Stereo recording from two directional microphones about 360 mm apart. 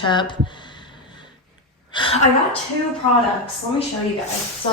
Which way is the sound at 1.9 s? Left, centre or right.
Centre.